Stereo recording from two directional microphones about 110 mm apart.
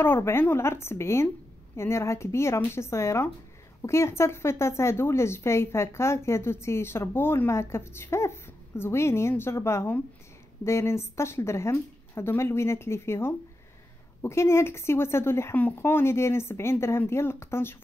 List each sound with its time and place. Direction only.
0.0 s a woman's voice: 20° left (ahead or behind)